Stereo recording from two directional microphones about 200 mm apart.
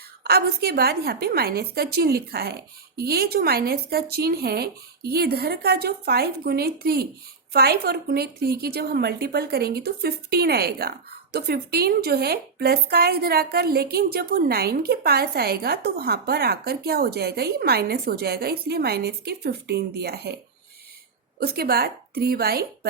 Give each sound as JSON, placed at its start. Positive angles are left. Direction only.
{"t": 0.3, "sound": "a woman's voice", "side_deg": -50}
{"t": 21.3, "sound": "a woman's voice", "side_deg": -50}